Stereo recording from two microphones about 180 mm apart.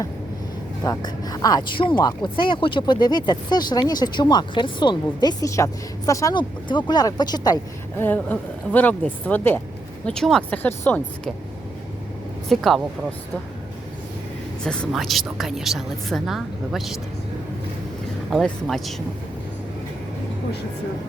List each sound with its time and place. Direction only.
0.9 s speech: 20° left (ahead or behind)
12.5 s speech: centre (ahead or behind)
14.6 s speech: centre (ahead or behind)
18.3 s speech: centre (ahead or behind)